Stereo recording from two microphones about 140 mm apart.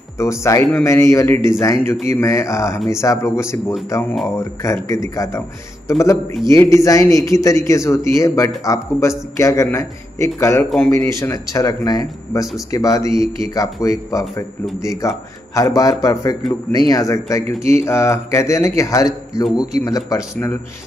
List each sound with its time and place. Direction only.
0.2 s a man's voice: 20° left (ahead or behind)